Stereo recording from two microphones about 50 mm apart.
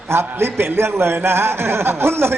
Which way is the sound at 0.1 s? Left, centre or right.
Right.